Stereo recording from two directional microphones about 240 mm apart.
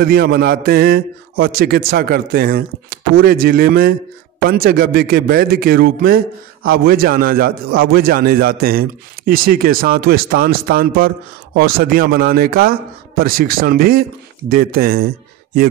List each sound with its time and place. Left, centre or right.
0.0 s a man's voice: right